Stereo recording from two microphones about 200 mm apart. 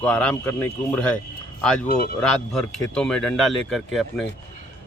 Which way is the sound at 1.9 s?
50° left (ahead or behind).